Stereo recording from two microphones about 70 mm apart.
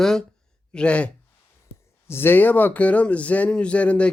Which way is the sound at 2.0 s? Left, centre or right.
Left.